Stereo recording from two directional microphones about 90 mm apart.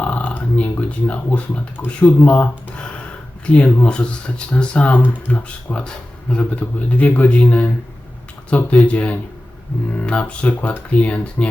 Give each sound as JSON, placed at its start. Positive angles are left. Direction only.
{"t": 0.0, "sound": "speech", "side_deg": 15}